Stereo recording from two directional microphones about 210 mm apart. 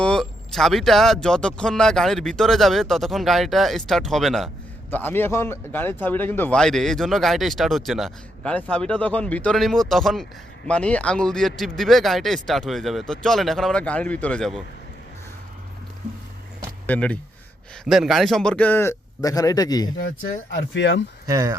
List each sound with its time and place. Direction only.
0.0 s speech: 5° left (ahead or behind)
16.8 s speech: 5° left (ahead or behind)
20.0 s speech: 40° left (ahead or behind)
20.7 s speech: 60° left (ahead or behind)
21.2 s speech: 15° right (ahead or behind)